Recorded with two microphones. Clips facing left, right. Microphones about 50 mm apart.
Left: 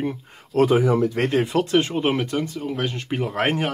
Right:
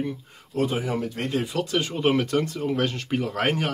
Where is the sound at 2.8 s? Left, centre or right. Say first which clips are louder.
Left 1 dB; centre.